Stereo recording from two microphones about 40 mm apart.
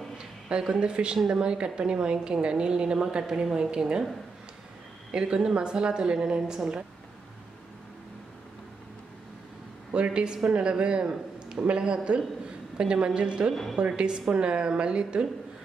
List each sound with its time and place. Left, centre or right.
0.5 s a woman's voice: right
1.1 s speech: centre
1.4 s a woman's voice: right
5.1 s a woman's voice: right
9.9 s a woman's voice: right